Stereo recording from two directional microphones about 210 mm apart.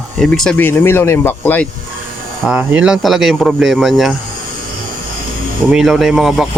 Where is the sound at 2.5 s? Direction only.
5° right (ahead or behind).